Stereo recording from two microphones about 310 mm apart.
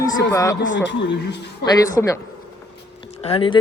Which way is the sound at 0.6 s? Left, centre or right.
Left.